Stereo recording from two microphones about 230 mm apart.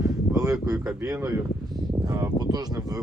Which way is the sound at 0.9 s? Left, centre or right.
Centre.